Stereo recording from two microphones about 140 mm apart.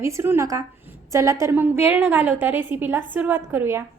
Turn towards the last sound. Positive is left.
turn(degrees=-15)  # may be behind; listen again after turning